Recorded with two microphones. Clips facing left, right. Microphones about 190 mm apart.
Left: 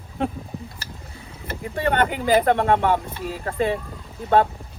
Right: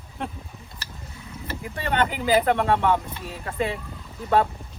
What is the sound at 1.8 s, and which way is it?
Speech, 60° left (ahead or behind).